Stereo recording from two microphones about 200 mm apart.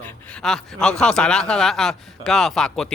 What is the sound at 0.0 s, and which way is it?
Speech, 5° left (ahead or behind).